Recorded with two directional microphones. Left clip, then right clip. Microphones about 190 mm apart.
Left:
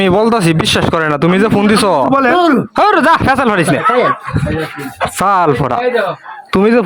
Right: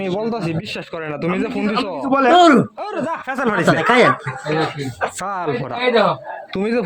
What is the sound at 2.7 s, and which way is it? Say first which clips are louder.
Speech: left 15 dB; 50° left (ahead or behind).